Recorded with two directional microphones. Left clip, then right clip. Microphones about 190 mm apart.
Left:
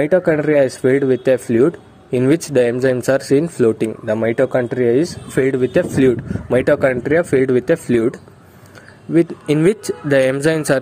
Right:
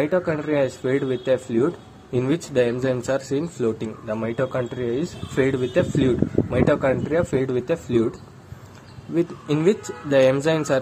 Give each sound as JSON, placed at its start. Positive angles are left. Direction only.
{"t": 0.0, "sound": "speech", "side_deg": 40}
{"t": 9.1, "sound": "speech", "side_deg": 40}